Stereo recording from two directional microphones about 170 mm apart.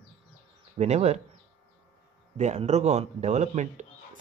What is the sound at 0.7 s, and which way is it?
Speech, 40° right (ahead or behind).